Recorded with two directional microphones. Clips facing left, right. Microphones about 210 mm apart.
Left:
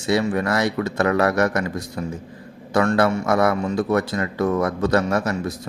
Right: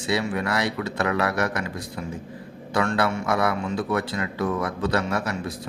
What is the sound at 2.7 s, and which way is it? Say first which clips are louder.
Speech: left 5 dB; 45° left (ahead or behind).